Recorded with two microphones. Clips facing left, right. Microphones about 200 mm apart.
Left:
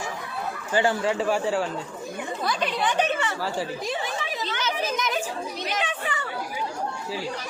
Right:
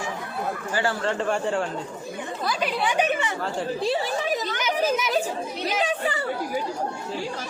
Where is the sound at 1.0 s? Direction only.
5° left (ahead or behind); by 3.3 s 15° right (ahead or behind).